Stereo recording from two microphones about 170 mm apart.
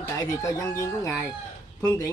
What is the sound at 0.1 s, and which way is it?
A man's voice, 20° left (ahead or behind).